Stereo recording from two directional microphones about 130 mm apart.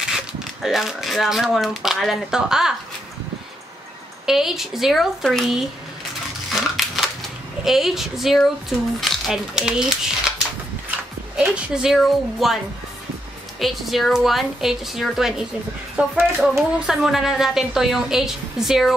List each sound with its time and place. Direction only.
0.0 s speech: 5° right (ahead or behind)
4.3 s speech: 5° right (ahead or behind)
6.5 s crushing: centre (ahead or behind)
7.6 s speech: centre (ahead or behind)
11.3 s speech: 10° right (ahead or behind)
13.6 s speech: centre (ahead or behind)